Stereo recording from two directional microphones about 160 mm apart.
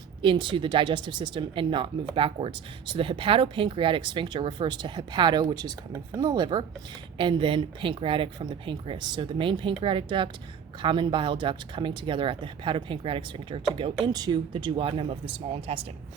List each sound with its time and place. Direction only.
0.2 s speech: 30° right (ahead or behind)